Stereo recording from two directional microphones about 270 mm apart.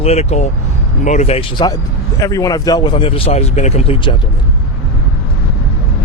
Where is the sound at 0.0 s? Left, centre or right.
Left.